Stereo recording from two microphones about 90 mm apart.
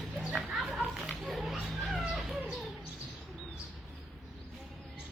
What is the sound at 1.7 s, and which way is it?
Cat, centre (ahead or behind).